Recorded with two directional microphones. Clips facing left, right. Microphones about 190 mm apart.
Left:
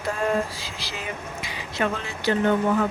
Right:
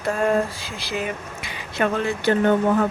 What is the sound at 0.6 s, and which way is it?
Speech, 55° right (ahead or behind).